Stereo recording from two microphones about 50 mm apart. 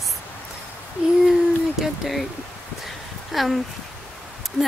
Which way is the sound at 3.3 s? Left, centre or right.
Centre.